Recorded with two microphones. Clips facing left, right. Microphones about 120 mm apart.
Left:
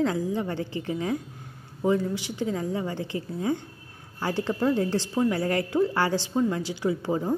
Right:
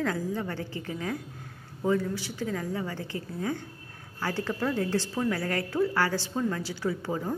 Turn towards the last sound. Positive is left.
turn(degrees=20)  # may be behind; listen again after turning